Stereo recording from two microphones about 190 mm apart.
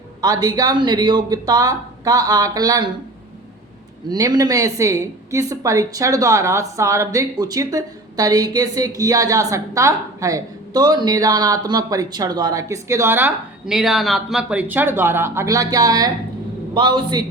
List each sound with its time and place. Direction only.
0.2 s speech: 20° right (ahead or behind)
4.1 s a woman's voice: 20° right (ahead or behind)